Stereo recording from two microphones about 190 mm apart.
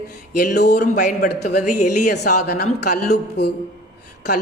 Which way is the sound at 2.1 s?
55° left (ahead or behind).